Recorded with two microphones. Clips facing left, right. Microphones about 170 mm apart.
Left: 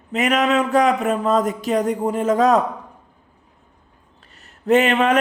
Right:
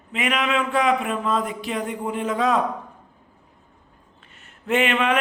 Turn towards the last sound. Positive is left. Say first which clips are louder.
# left 5 dB
turn(degrees=40)  # may be behind; listen again after turning